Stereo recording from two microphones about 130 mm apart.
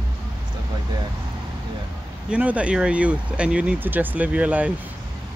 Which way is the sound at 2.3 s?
10° right (ahead or behind).